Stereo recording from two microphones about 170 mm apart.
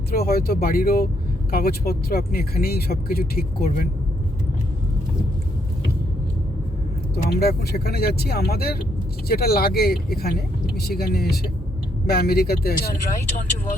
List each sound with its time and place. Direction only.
0.1 s speech: 60° left (ahead or behind)
7.3 s speech: 70° left (ahead or behind)